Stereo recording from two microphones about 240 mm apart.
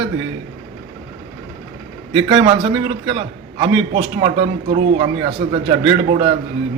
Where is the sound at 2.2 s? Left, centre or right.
Centre.